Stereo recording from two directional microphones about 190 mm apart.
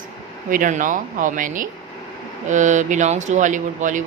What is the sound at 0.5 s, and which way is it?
Speech, 45° right (ahead or behind).